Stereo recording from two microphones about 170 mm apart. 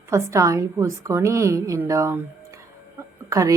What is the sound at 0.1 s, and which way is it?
A woman's voice, 15° right (ahead or behind).